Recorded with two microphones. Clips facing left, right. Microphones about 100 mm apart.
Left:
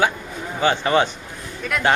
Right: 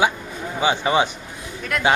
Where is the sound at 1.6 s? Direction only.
Centre (ahead or behind).